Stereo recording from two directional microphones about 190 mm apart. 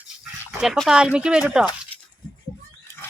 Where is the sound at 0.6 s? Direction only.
Centre (ahead or behind).